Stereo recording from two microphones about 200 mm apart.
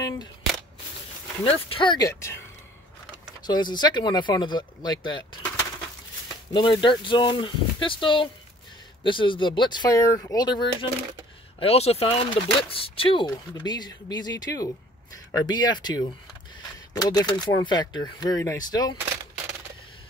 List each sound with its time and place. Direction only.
1.4 s speech: 30° left (ahead or behind)
3.4 s speech: 20° left (ahead or behind)
6.5 s speech: 25° left (ahead or behind)